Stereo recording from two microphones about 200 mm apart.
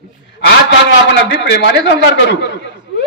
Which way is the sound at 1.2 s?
60° left (ahead or behind).